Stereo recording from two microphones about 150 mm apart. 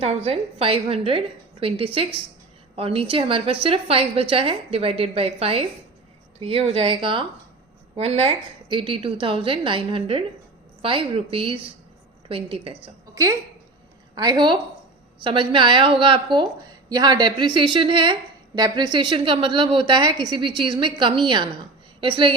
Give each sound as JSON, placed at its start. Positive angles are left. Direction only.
{"t": 0.0, "sound": "a woman's voice", "side_deg": -40}
{"t": 14.2, "sound": "a woman's voice", "side_deg": -30}